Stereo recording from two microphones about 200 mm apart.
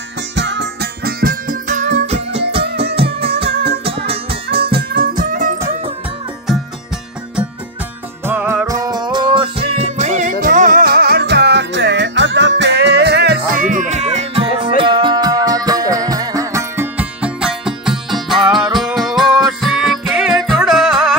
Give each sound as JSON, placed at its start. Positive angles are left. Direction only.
{"t": 0.4, "sound": "music", "side_deg": -60}
{"t": 3.5, "sound": "music", "side_deg": -50}
{"t": 3.8, "sound": "music", "side_deg": -30}
{"t": 4.9, "sound": "music", "side_deg": -45}
{"t": 8.3, "sound": "music", "side_deg": -10}